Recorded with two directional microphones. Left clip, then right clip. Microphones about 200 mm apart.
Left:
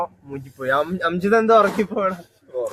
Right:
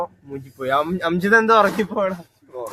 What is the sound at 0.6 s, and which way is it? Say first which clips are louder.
Speech: even; 30° right (ahead or behind).